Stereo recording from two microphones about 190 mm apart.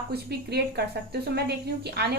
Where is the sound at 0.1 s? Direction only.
60° right (ahead or behind).